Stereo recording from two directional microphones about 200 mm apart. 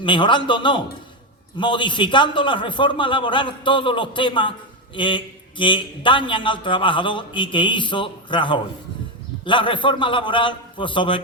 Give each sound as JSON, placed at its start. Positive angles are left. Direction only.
{"t": 0.0, "sound": "a man's voice", "side_deg": 25}